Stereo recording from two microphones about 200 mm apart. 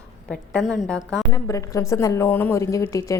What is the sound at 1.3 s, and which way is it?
A woman's voice, 15° left (ahead or behind).